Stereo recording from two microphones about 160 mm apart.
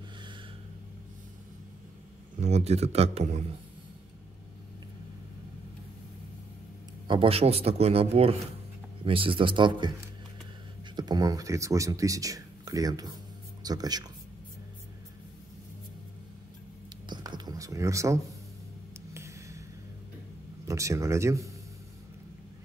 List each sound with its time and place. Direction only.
2.4 s speech: 40° right (ahead or behind)
7.1 s speech: 35° right (ahead or behind)
11.0 s speech: 25° right (ahead or behind)
17.1 s a sound: 25° right (ahead or behind)
20.6 s speech: 20° right (ahead or behind)